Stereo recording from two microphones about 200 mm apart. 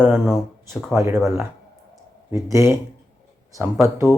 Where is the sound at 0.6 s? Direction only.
15° right (ahead or behind).